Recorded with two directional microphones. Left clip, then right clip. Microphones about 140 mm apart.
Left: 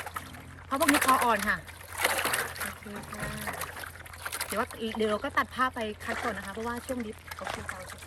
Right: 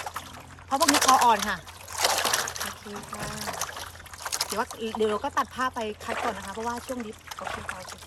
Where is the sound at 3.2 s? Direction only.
40° right (ahead or behind).